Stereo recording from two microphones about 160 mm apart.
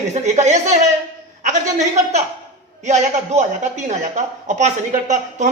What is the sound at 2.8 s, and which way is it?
Speech, 45° right (ahead or behind).